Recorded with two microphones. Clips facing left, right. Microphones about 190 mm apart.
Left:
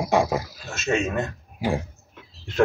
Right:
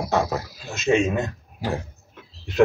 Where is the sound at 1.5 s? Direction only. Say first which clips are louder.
Left 3 dB; 10° left (ahead or behind).